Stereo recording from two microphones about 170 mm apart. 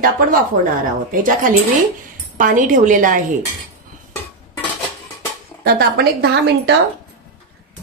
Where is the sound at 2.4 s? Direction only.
50° right (ahead or behind).